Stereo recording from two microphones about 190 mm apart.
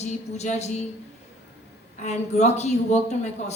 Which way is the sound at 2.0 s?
35° left (ahead or behind).